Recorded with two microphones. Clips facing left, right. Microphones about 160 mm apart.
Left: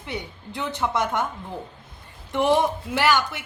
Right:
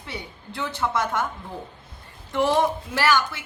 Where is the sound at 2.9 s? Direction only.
20° left (ahead or behind).